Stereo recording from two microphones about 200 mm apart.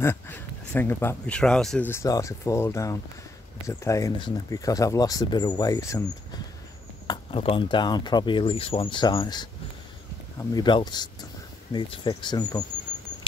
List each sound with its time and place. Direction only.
0.0 s speech: 10° left (ahead or behind)
7.1 s speech: 25° left (ahead or behind)
10.5 s speech: 20° left (ahead or behind)